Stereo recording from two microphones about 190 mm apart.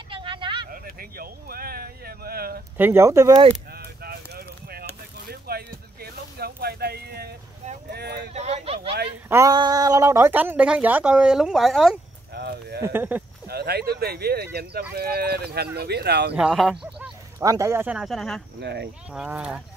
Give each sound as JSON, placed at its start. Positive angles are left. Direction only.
{"t": 0.1, "sound": "vehicle", "side_deg": -25}
{"t": 0.7, "sound": "a sound", "side_deg": -50}
{"t": 2.8, "sound": "a woman's voice", "side_deg": -15}
{"t": 3.7, "sound": "a sound", "side_deg": -55}
{"t": 7.9, "sound": "speech", "side_deg": -60}
{"t": 8.3, "sound": "speech", "side_deg": -35}
{"t": 9.3, "sound": "a woman's voice", "side_deg": -20}
{"t": 12.4, "sound": "clip-clop", "side_deg": -60}
{"t": 12.8, "sound": "a woman's voice", "side_deg": -10}
{"t": 13.5, "sound": "speech", "side_deg": -55}
{"t": 16.3, "sound": "speech", "side_deg": -5}
{"t": 17.4, "sound": "a woman's voice", "side_deg": -15}
{"t": 18.6, "sound": "speech", "side_deg": -60}
{"t": 19.1, "sound": "speech", "side_deg": -5}